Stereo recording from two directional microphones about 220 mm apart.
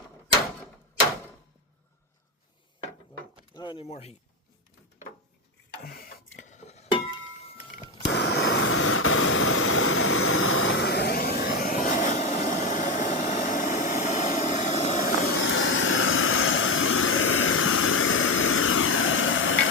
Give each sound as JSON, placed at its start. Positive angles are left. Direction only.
{"t": 3.5, "sound": "door", "side_deg": 20}
{"t": 5.8, "sound": "dishes", "side_deg": 40}
{"t": 8.0, "sound": "vehicle", "side_deg": 50}
{"t": 15.4, "sound": "a sound", "side_deg": 60}